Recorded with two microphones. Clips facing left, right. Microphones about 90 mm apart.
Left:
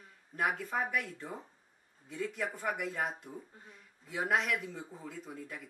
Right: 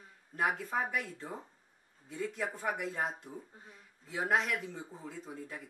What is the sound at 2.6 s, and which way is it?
Speech, 20° right (ahead or behind).